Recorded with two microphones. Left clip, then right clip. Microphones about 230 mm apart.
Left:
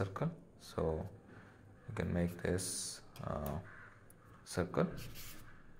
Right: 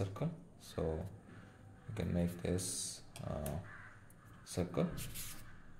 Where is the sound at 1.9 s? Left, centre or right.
Centre.